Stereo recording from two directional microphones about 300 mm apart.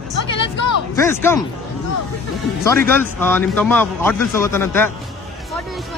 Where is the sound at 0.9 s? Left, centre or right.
Centre.